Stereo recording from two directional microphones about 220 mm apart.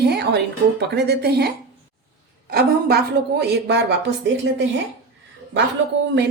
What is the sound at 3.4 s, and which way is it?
Speech, 50° right (ahead or behind).